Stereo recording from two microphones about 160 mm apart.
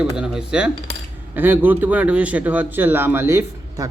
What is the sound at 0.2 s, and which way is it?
Speech, 5° right (ahead or behind).